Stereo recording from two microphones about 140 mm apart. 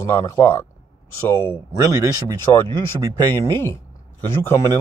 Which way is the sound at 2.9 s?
20° left (ahead or behind).